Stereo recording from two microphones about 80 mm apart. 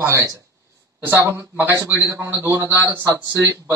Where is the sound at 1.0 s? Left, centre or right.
Right.